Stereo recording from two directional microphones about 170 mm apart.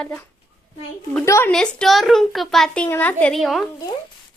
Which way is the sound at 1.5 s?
Centre (ahead or behind).